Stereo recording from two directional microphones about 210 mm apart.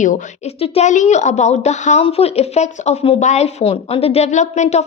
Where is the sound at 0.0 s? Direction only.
35° left (ahead or behind).